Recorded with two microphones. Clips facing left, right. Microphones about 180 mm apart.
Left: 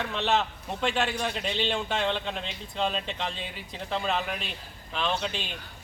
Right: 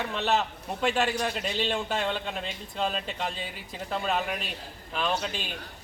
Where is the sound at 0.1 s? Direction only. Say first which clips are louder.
Left 1 dB; 5° right (ahead or behind).